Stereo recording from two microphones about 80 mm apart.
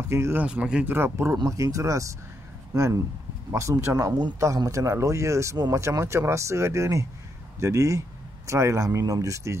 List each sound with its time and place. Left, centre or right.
0.1 s speech: right
0.4 s speech: centre
0.8 s speech: right
1.4 s speech: right